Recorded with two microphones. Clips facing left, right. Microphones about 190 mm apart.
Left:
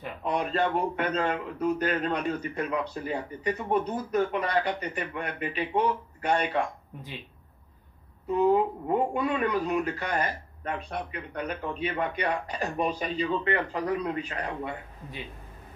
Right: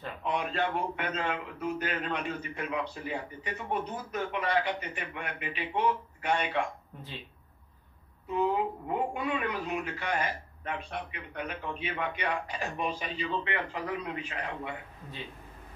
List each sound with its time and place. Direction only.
0.2 s a man's voice: 40° left (ahead or behind)
8.8 s a man's voice: 35° left (ahead or behind)